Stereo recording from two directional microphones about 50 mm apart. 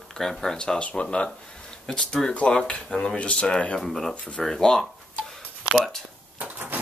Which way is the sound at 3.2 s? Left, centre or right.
Left.